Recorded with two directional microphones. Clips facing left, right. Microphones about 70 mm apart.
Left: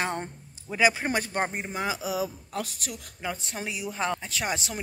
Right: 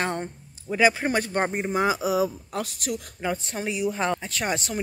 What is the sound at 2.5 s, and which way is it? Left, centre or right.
Speech, centre.